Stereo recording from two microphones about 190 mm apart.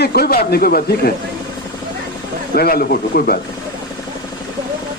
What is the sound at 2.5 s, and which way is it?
Speech, 50° left (ahead or behind).